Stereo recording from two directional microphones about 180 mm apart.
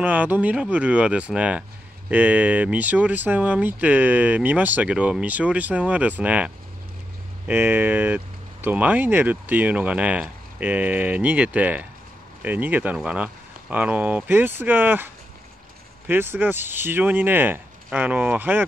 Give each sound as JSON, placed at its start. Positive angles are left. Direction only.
{"t": 0.0, "sound": "speech", "side_deg": -10}
{"t": 16.1, "sound": "speech", "side_deg": -10}